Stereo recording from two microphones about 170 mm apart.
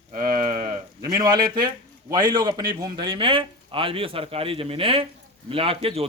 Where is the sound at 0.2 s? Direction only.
25° right (ahead or behind).